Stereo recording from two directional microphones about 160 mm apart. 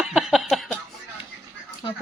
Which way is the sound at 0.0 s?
5° right (ahead or behind).